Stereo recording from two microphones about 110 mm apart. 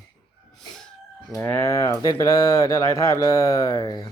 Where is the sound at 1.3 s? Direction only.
25° left (ahead or behind).